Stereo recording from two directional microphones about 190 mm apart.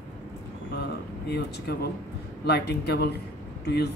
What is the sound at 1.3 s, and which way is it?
Speech, 60° left (ahead or behind).